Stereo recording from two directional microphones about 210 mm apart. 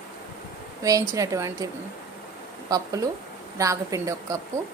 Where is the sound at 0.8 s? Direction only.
15° right (ahead or behind).